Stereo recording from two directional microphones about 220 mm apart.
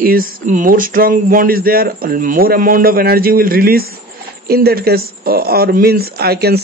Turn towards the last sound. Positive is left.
turn(degrees=-45)  # may be behind; listen again after turning